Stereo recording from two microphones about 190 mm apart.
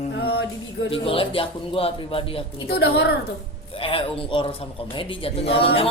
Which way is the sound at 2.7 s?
55° left (ahead or behind).